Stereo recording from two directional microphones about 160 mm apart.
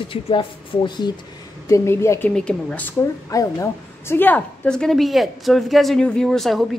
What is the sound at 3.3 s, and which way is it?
A woman's voice, 20° left (ahead or behind).